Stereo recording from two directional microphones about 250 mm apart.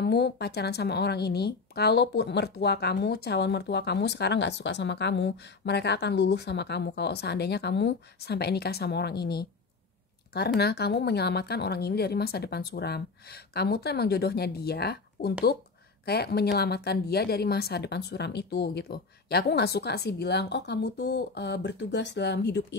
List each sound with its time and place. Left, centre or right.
0.0 s speech: left